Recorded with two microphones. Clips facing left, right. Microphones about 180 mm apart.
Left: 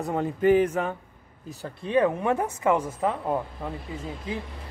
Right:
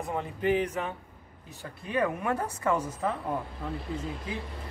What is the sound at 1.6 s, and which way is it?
Speech, 30° left (ahead or behind).